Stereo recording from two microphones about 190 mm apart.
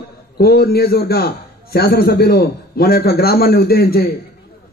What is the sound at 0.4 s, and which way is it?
A man's voice, 55° left (ahead or behind).